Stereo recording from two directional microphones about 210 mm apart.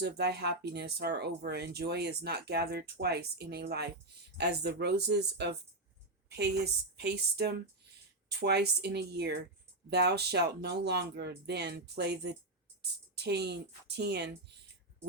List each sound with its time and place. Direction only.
0.0 s speech: 50° right (ahead or behind)
6.2 s a sound: 50° right (ahead or behind)
6.9 s speech: 50° right (ahead or behind)